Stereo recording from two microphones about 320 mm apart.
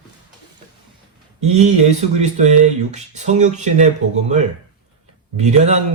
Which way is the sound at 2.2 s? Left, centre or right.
Right.